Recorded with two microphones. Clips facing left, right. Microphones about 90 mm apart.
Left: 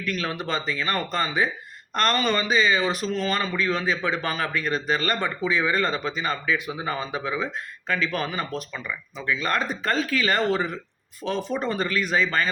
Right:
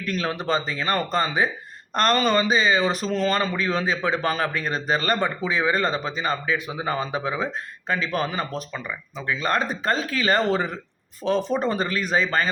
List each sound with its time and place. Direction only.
0.0 s a man's voice: 30° right (ahead or behind)
3.5 s a man's voice: 20° right (ahead or behind)